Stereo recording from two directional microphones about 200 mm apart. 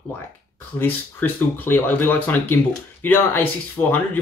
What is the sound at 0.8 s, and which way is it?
Speech, 10° left (ahead or behind).